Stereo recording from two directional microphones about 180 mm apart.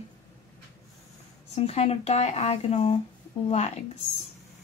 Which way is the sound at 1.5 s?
35° left (ahead or behind).